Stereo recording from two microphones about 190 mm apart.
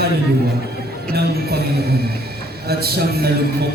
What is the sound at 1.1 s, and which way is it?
A man's voice, 55° right (ahead or behind).